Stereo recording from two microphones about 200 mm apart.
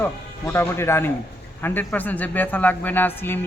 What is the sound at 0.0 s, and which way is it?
Speech, 10° left (ahead or behind).